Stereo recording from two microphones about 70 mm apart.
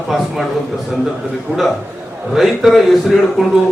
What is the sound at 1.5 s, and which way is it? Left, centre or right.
Speech, centre.